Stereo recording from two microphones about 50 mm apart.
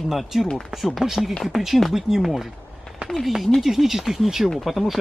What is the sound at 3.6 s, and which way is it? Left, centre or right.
Speech, centre.